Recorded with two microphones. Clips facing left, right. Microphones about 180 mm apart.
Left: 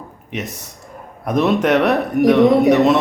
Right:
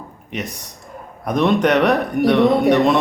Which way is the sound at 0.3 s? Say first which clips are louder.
Left 1 dB; centre (ahead or behind).